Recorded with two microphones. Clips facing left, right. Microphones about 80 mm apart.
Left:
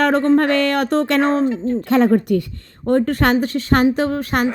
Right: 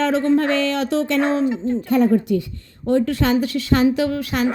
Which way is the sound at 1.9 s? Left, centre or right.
Left.